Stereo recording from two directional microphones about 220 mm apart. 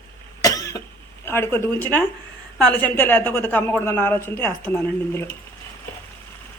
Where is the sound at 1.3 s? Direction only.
10° left (ahead or behind).